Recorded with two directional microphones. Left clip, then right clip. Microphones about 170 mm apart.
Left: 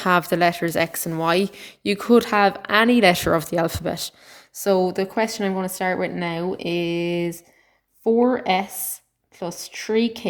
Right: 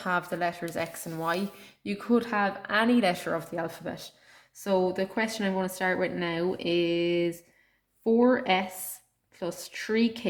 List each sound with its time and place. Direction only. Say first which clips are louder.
0.0 s speech: left 10 dB; 50° left (ahead or behind)